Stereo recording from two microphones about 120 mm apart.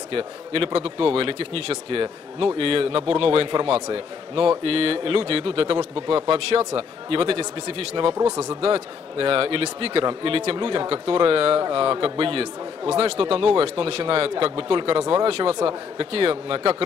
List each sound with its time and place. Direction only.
0.1 s a man's voice: 50° right (ahead or behind)
15.2 s a man's voice: 50° right (ahead or behind)